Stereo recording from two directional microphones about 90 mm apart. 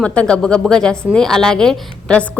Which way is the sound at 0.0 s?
10° left (ahead or behind).